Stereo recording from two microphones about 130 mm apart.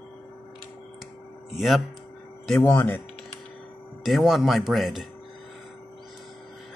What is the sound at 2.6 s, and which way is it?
Speech, 20° left (ahead or behind).